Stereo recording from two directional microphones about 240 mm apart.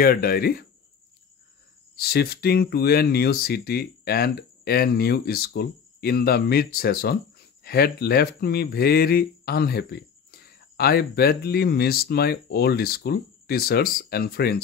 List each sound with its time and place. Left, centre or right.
0.0 s speech: left
2.0 s speech: left